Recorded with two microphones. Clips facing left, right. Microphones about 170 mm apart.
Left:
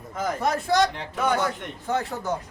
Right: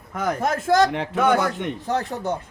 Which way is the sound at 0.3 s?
50° right (ahead or behind).